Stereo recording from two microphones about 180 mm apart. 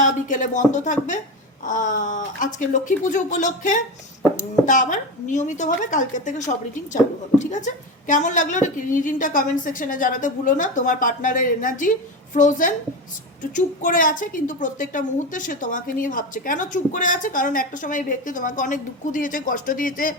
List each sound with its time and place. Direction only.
0.0 s a woman's voice: 45° left (ahead or behind)